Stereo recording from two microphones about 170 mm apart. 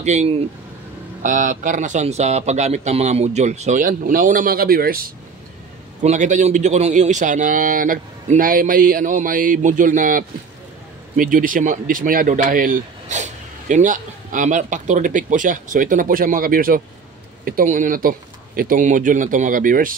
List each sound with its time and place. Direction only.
0.0 s speech: 40° right (ahead or behind); by 5.0 s 60° right (ahead or behind)
6.0 s speech: 45° right (ahead or behind)